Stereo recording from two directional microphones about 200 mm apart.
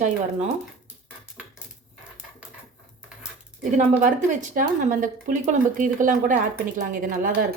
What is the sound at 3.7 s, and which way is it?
Speech, 40° right (ahead or behind).